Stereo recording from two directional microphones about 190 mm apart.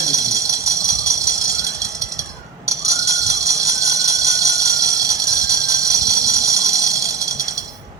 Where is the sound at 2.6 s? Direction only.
15° right (ahead or behind).